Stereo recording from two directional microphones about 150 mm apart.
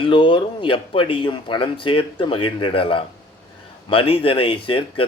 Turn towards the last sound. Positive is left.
turn(degrees=35)  # may be behind; listen again after turning